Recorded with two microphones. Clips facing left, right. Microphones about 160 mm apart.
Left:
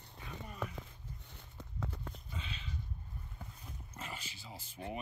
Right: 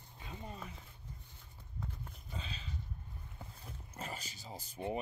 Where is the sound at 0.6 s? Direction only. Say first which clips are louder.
Left 7 dB; 90° left.